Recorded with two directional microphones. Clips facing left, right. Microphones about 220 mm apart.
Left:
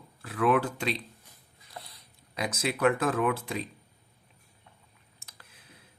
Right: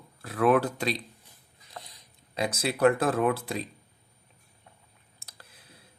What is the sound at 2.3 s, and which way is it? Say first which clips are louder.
Speech: right 2 dB; 30° right (ahead or behind).